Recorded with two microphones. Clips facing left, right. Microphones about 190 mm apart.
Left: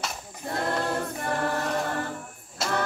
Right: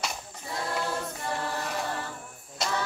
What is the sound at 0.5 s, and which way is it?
A capella, 55° left (ahead or behind).